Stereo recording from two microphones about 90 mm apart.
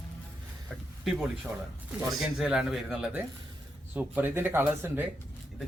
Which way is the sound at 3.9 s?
20° right (ahead or behind).